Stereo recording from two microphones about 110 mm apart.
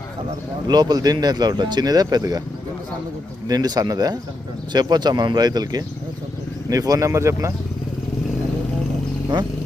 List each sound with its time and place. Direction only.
0.7 s speech: 40° right (ahead or behind)
3.4 s speech: 35° right (ahead or behind)
9.3 s speech: 40° right (ahead or behind)